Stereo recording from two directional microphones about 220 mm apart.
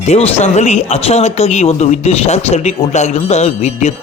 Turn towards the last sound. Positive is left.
turn(degrees=30)  # may be behind; listen again after turning